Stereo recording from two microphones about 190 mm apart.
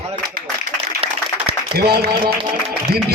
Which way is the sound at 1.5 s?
60° right (ahead or behind).